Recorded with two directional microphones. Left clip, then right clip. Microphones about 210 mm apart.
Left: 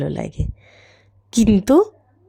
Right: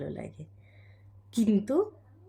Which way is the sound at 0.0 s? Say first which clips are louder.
Left 13 dB; 45° left (ahead or behind).